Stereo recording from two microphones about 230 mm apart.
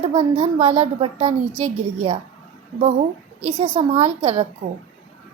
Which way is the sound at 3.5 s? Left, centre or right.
Right.